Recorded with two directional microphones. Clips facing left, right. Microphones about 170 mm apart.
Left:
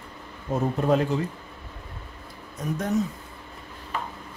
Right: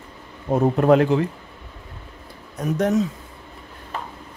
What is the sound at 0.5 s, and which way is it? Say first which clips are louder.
Speech: right 7 dB; 65° right (ahead or behind).